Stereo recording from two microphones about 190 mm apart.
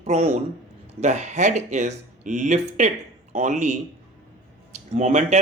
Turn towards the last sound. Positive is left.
turn(degrees=-40)  # may be behind; listen again after turning